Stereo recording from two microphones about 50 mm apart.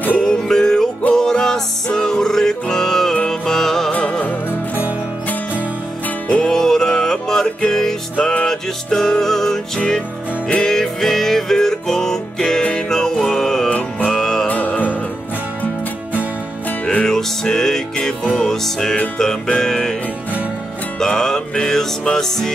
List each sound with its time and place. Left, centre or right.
0.2 s music: centre
3.9 s music: left
6.2 s music: centre
13.7 s music: left
14.1 s music: centre
16.8 s music: centre
21.2 s music: centre